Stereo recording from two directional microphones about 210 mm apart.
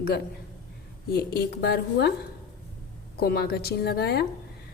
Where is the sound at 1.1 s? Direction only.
50° left (ahead or behind).